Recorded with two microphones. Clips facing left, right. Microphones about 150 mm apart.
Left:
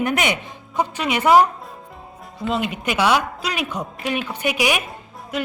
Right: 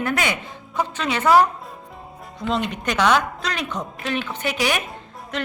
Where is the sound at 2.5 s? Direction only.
5° left (ahead or behind).